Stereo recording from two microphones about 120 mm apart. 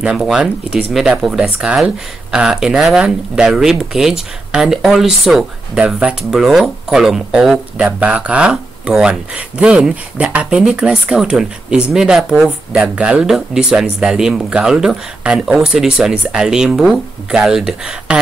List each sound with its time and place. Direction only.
0.0 s speech: 5° right (ahead or behind)